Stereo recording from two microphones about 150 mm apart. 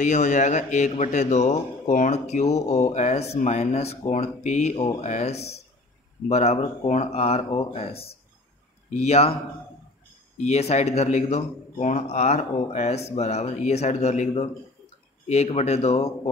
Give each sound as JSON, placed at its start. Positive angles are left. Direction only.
{"t": 0.0, "sound": "a man's voice", "side_deg": 55}
{"t": 10.3, "sound": "a man's voice", "side_deg": 50}